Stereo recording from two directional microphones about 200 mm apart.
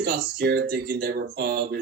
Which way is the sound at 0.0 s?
50° right (ahead or behind).